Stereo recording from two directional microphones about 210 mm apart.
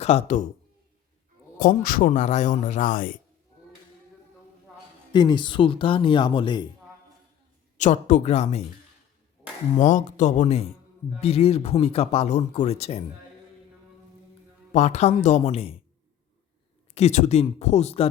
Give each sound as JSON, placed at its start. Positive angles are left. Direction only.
{"t": 0.0, "sound": "a man's voice", "side_deg": 30}
{"t": 1.5, "sound": "a man's voice", "side_deg": 40}
{"t": 5.1, "sound": "speech", "side_deg": 20}
{"t": 7.8, "sound": "a man's voice", "side_deg": 35}
{"t": 9.7, "sound": "a man's voice", "side_deg": 35}
{"t": 14.7, "sound": "a man's voice", "side_deg": 35}
{"t": 16.9, "sound": "a man's voice", "side_deg": 30}